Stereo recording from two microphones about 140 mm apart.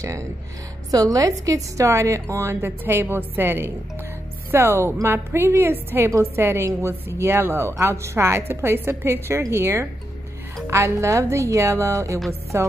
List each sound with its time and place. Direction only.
0.0 s a woman's voice: 20° right (ahead or behind)